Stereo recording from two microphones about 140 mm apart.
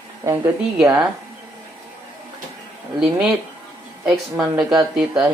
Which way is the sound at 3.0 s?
5° right (ahead or behind).